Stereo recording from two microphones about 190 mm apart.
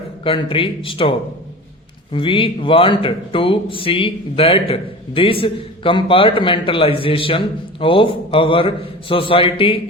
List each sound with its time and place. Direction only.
0.3 s speech: 30° left (ahead or behind)
2.1 s speech: 25° left (ahead or behind)